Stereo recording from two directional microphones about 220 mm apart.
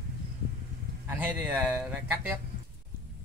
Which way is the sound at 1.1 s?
5° right (ahead or behind).